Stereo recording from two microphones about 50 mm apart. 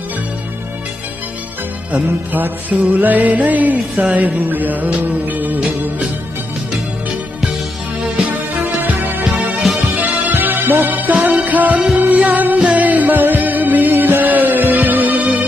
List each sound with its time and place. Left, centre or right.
1.9 s music: right
5.5 s music: right
8.2 s music: right
9.4 s music: right
10.3 s music: right